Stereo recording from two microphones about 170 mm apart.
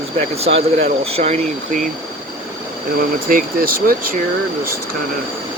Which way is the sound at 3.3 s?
60° right (ahead or behind).